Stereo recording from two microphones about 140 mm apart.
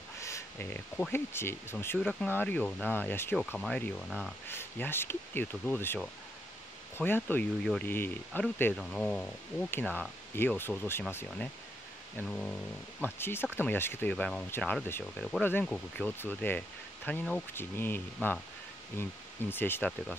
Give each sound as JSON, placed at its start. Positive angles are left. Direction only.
{"t": 0.2, "sound": "speech", "side_deg": 20}
{"t": 2.0, "sound": "speech", "side_deg": 5}
{"t": 3.3, "sound": "speech", "side_deg": 5}
{"t": 4.5, "sound": "speech", "side_deg": 15}
{"t": 7.0, "sound": "speech", "side_deg": 15}